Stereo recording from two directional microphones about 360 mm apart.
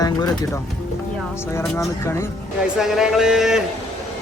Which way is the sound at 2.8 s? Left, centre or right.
Centre.